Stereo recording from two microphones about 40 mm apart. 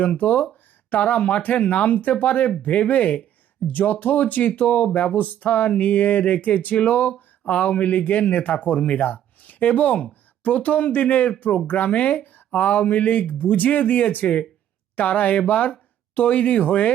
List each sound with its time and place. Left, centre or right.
0.2 s speech: left